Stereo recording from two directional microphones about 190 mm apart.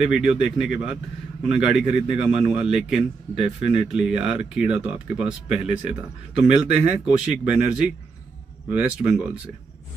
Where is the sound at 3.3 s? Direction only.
35° right (ahead or behind).